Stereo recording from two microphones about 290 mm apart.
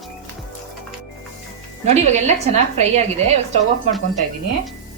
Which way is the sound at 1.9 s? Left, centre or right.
Right.